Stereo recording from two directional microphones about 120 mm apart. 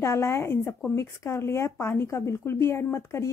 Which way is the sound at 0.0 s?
20° left (ahead or behind).